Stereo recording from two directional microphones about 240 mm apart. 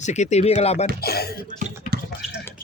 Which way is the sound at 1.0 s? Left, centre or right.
Left.